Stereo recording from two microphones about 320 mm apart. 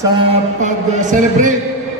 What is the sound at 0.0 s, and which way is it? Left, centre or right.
Music, right.